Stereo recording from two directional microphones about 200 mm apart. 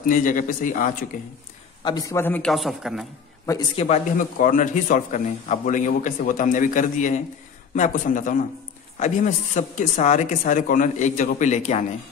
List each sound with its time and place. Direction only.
0.0 s speech: 40° left (ahead or behind)
1.9 s a man's voice: 15° left (ahead or behind); by 3.1 s centre (ahead or behind)
3.7 s a man's voice: 35° left (ahead or behind)